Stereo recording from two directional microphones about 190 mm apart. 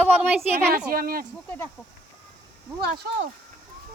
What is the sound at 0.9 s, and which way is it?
Speech, 50° right (ahead or behind).